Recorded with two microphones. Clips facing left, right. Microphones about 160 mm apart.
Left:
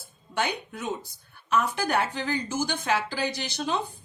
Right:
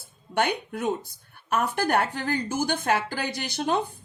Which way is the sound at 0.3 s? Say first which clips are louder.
Right 4 dB; 55° right (ahead or behind).